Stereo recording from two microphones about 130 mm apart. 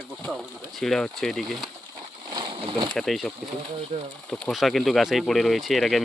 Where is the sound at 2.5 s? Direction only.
45° right (ahead or behind).